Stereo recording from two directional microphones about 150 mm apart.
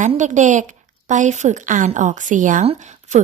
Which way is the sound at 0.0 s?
55° right (ahead or behind).